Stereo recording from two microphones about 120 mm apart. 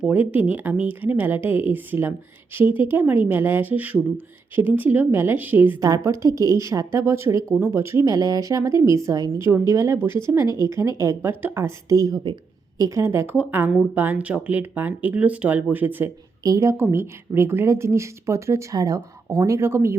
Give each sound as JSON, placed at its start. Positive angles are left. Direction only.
{"t": 0.0, "sound": "speech", "side_deg": -10}
{"t": 12.8, "sound": "speech", "side_deg": -25}
{"t": 16.4, "sound": "speech", "side_deg": -30}